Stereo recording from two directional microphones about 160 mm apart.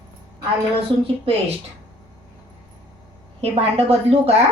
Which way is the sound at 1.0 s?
35° right (ahead or behind).